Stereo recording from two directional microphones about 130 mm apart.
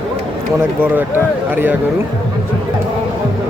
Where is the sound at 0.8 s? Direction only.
15° right (ahead or behind).